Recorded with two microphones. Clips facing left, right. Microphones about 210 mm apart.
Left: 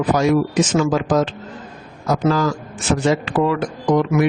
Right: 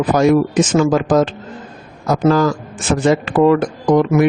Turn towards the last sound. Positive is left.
turn(degrees=-50)  # may be behind; listen again after turning